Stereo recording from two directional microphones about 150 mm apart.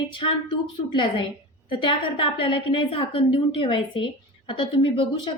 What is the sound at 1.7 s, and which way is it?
A woman's voice, 35° left (ahead or behind).